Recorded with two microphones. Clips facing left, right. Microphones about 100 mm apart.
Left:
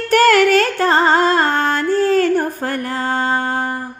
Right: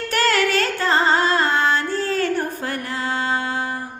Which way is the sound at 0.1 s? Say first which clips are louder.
Left 8 dB; 50° left (ahead or behind).